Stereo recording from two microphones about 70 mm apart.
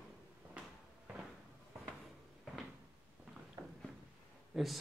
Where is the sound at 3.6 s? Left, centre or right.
Right.